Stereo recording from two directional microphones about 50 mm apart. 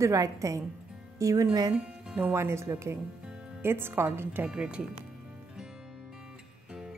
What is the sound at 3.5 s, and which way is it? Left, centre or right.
Speech, right.